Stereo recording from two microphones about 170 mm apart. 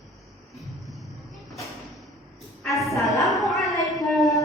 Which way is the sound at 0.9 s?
Centre (ahead or behind).